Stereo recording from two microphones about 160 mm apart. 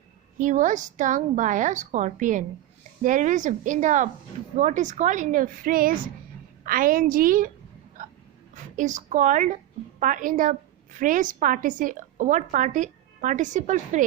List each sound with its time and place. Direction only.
0.3 s a woman's voice: 50° right (ahead or behind)
8.0 s a sound: 55° right (ahead or behind)
8.5 s a woman's voice: 50° right (ahead or behind)